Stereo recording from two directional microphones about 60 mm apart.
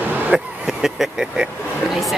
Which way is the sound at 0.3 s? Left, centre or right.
Centre.